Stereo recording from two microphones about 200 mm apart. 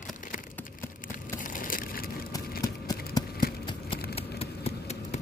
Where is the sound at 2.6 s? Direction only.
20° left (ahead or behind).